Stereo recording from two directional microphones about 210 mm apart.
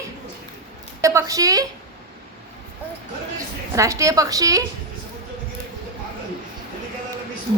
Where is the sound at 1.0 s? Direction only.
15° right (ahead or behind).